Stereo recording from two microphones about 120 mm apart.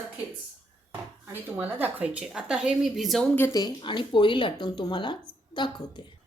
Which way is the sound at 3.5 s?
35° left (ahead or behind).